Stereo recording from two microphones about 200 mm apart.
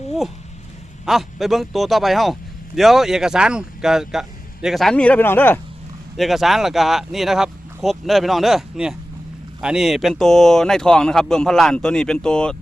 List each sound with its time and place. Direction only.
1.0 s a man's voice: centre (ahead or behind)
6.1 s a man's voice: centre (ahead or behind)